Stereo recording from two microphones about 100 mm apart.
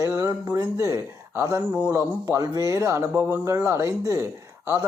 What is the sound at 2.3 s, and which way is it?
Speech, 35° right (ahead or behind).